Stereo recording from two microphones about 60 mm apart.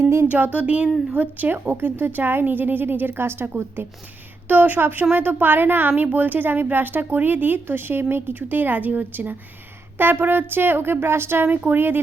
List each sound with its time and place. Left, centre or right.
0.0 s speech: right
0.3 s a woman's voice: right